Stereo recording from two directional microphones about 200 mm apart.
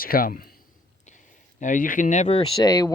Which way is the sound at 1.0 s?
40° left (ahead or behind).